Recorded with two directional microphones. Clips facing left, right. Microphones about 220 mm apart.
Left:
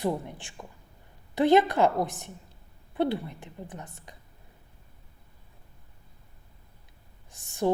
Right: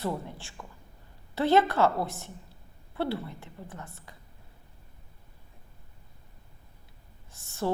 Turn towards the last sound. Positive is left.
turn(degrees=15)  # may be behind; listen again after turning